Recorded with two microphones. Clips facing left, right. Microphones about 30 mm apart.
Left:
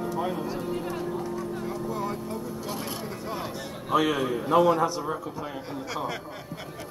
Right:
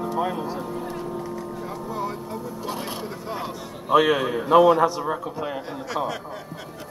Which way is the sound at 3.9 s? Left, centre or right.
Right.